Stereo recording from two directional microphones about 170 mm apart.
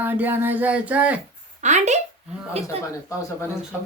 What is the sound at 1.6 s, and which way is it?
A woman's voice, 45° right (ahead or behind).